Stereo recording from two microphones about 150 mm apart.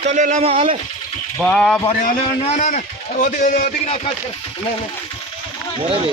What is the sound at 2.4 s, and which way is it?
A man's voice, 50° left (ahead or behind).